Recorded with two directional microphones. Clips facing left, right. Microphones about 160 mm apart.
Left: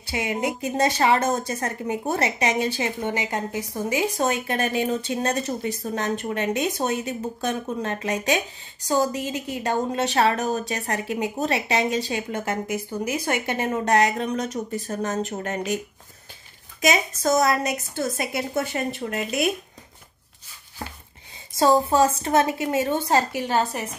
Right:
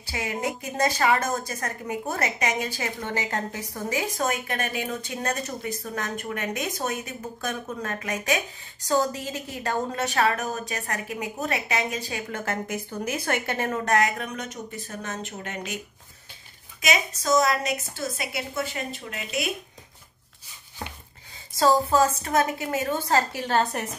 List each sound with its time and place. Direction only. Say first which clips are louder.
0.1 s a woman's voice: left 4 dB; 20° left (ahead or behind)
8.8 s a woman's voice: left 2 dB; 15° left (ahead or behind); by 15.8 s 40° left (ahead or behind)
16.8 s a woman's voice: left 4 dB; 45° left (ahead or behind)
21.5 s a woman's voice: left 2 dB; 25° left (ahead or behind)
23.6 s a woman's voice: even; 5° left (ahead or behind)